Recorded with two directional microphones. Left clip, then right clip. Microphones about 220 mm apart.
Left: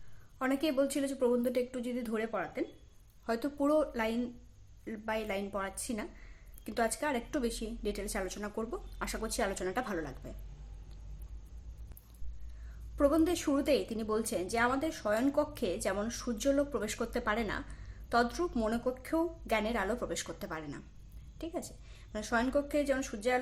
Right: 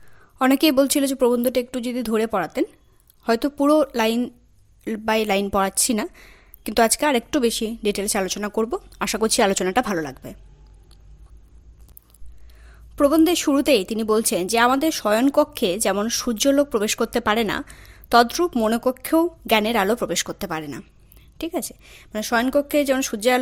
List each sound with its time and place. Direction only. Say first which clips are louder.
0.3 s a woman's voice: right 14 dB; 45° right (ahead or behind)
12.6 s a woman's voice: right 11 dB; 40° right (ahead or behind)